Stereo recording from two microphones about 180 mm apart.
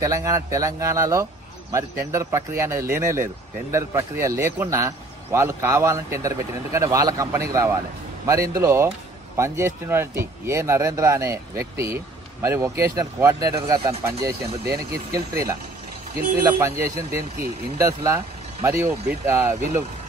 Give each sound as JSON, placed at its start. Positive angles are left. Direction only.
{"t": 0.0, "sound": "speech", "side_deg": -20}